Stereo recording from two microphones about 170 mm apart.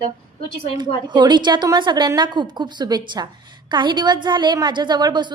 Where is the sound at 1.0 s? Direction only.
25° right (ahead or behind).